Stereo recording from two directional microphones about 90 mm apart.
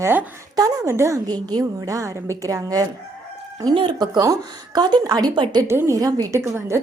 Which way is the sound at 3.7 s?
70° right (ahead or behind).